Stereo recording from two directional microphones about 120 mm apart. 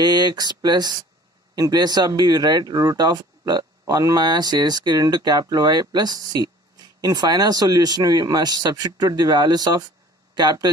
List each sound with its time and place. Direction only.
0.0 s speech: 35° right (ahead or behind)